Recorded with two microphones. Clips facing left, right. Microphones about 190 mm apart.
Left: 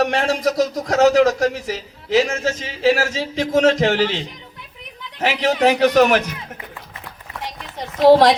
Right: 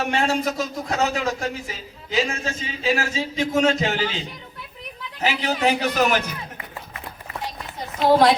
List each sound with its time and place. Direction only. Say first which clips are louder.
0.0 s a man's voice: left 4 dB; 85° left
5.2 s a man's voice: left 5 dB; 90° left
8.0 s a man's voice: left 5 dB; 85° left